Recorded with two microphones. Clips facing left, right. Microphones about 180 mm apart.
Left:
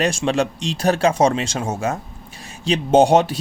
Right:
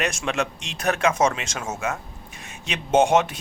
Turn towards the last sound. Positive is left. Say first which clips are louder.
# left 5 dB
turn(degrees=35)  # may be behind; listen again after turning